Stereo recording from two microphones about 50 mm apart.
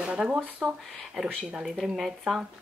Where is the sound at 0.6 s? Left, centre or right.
Centre.